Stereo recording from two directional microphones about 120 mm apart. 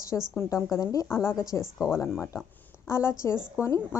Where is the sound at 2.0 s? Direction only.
25° left (ahead or behind).